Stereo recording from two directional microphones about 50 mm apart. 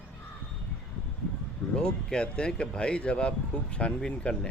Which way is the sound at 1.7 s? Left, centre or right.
Centre.